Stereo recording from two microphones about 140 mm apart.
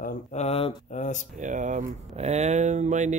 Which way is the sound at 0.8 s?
60° left (ahead or behind).